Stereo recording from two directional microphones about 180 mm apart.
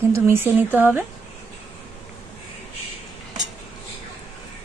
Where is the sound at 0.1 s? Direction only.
10° right (ahead or behind).